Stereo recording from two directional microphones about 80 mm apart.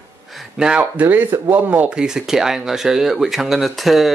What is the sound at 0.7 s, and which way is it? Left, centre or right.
Speech, centre.